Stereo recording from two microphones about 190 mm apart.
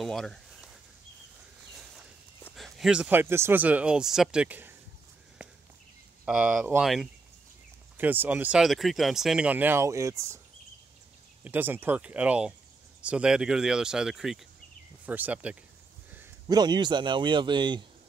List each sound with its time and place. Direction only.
0.0 s speech: centre (ahead or behind)
2.5 s speech: centre (ahead or behind)
6.2 s speech: 5° right (ahead or behind)
11.4 s speech: 10° right (ahead or behind)
16.4 s a man's voice: 20° right (ahead or behind)